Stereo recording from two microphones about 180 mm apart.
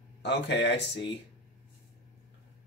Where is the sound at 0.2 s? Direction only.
75° left (ahead or behind).